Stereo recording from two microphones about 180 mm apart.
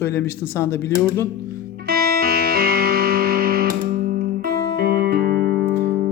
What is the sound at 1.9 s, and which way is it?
Music, 60° right (ahead or behind).